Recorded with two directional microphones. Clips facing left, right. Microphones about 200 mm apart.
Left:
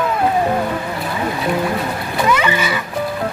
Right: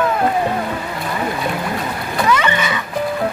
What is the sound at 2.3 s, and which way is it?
Music, 5° left (ahead or behind).